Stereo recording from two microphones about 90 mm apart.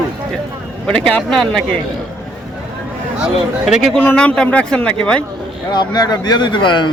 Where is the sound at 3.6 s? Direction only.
Centre (ahead or behind).